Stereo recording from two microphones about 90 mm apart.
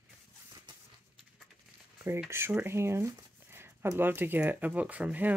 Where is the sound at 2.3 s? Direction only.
25° right (ahead or behind).